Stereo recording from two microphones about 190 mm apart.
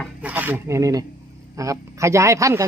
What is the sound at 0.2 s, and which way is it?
A man's voice, 10° right (ahead or behind).